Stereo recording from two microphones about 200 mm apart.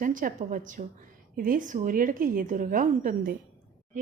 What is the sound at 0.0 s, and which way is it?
A woman's voice, 40° right (ahead or behind).